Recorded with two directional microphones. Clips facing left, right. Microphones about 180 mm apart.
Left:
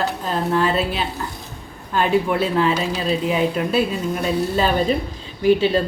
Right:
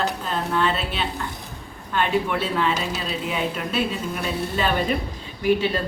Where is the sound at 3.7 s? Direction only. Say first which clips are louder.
Left 5 dB; 35° left (ahead or behind).